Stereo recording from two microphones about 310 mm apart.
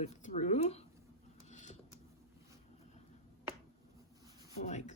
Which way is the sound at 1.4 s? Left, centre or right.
Left.